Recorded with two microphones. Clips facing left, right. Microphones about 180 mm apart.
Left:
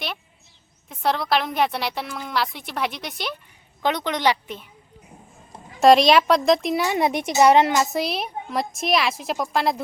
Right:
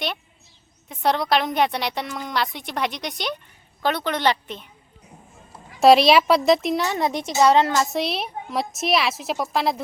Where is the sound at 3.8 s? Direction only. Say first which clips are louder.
Even; 15° left (ahead or behind).